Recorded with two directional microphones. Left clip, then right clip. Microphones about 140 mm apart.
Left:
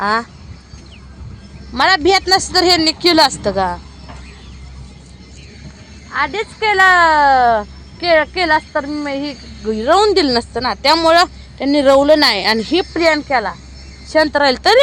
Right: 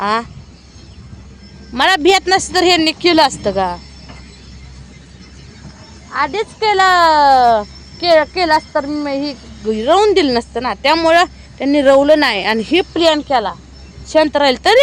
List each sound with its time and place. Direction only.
0.0 s speech: 5° right (ahead or behind)
1.7 s a woman's voice: 20° right (ahead or behind); by 3.8 s 5° right (ahead or behind)
6.1 s speech: 15° right (ahead or behind)
12.7 s speech: 15° right (ahead or behind)